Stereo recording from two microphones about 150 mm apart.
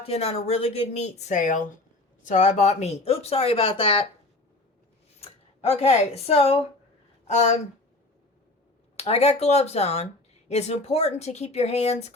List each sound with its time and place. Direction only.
0.0 s speech: 40° left (ahead or behind)
5.2 s speech: 45° left (ahead or behind)
9.0 s speech: 45° left (ahead or behind)